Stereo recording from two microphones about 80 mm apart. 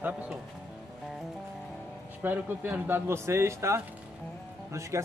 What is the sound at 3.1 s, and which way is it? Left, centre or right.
Speech, right.